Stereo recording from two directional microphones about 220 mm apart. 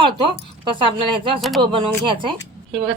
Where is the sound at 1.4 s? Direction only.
Centre (ahead or behind).